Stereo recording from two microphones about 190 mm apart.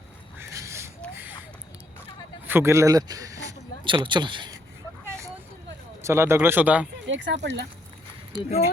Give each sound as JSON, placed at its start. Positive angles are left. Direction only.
{"t": 0.3, "sound": "duck", "side_deg": -15}
{"t": 2.5, "sound": "speech", "side_deg": -15}
{"t": 5.0, "sound": "vehicle", "side_deg": -15}
{"t": 6.0, "sound": "speech", "side_deg": -15}
{"t": 7.1, "sound": "speech", "side_deg": -70}
{"t": 8.3, "sound": "speech", "side_deg": -25}